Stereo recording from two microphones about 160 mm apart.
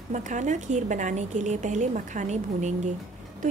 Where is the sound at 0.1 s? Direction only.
50° right (ahead or behind).